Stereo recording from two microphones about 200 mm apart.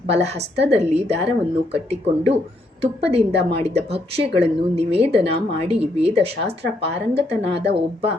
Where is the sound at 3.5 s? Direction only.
30° right (ahead or behind).